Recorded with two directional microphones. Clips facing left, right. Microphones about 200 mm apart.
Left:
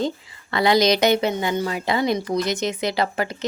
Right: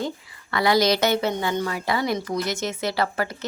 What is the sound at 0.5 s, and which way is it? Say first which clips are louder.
A woman's voice: left 2 dB; 20° left (ahead or behind).